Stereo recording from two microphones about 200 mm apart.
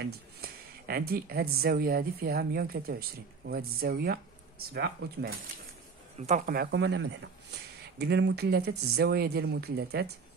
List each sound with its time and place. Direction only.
0.0 s speech: 50° right (ahead or behind)
6.1 s speech: 35° right (ahead or behind); by 10.1 s 55° right (ahead or behind)